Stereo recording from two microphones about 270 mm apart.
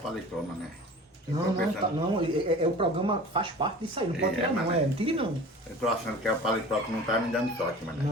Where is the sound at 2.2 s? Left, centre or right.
Centre.